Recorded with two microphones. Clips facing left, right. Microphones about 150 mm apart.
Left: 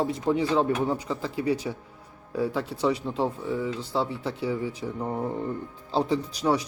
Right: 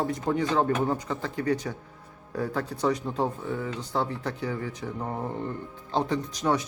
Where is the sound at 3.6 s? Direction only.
30° left (ahead or behind).